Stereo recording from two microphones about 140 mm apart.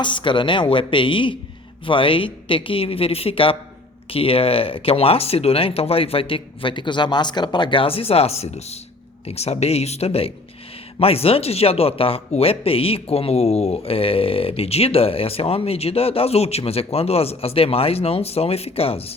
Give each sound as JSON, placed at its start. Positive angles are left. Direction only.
{"t": 0.0, "sound": "a woman's voice", "side_deg": 35}